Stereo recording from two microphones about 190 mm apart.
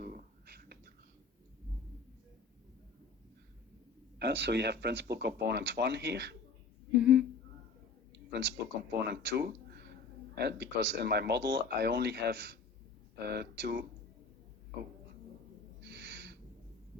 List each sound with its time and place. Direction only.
0.0 s whispering: 45° right (ahead or behind)
4.2 s speech: 60° right (ahead or behind)
6.9 s speech: 5° right (ahead or behind)
8.1 s a sound: 60° right (ahead or behind)
10.3 s speech: 60° right (ahead or behind)
15.8 s a sound: 60° right (ahead or behind)